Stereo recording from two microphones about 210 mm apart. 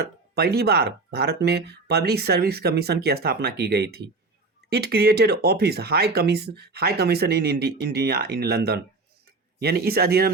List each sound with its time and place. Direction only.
0.3 s speech: 50° right (ahead or behind)